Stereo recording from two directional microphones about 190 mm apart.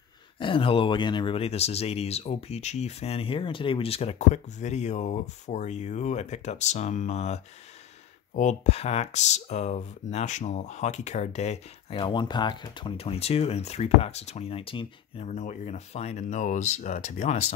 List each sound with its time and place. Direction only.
0.4 s speech: 25° left (ahead or behind)
12.0 s speech: 25° left (ahead or behind)